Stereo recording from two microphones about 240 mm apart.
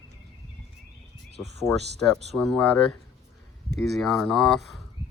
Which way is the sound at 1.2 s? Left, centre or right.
Right.